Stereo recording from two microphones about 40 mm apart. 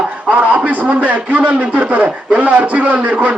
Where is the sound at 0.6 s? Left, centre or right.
Right.